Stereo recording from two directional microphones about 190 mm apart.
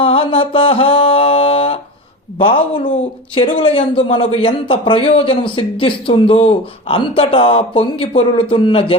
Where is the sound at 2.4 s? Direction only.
30° left (ahead or behind).